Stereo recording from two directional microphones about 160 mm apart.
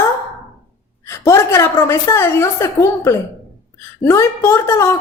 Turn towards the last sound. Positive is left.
turn(degrees=15)  # may be behind; listen again after turning